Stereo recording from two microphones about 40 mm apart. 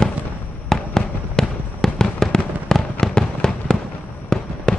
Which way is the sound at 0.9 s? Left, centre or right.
Centre.